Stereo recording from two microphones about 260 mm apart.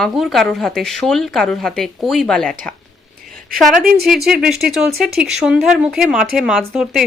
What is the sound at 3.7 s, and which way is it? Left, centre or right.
Speech, right.